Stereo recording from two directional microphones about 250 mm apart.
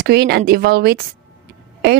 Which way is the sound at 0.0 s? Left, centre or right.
Right.